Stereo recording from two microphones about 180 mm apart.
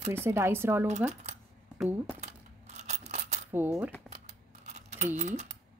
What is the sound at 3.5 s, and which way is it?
Speech, 10° right (ahead or behind).